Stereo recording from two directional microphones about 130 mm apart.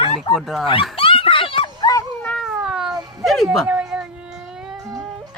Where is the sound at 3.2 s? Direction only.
Centre (ahead or behind).